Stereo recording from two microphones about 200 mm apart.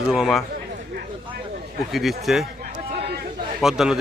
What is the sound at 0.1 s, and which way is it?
Speech, centre (ahead or behind).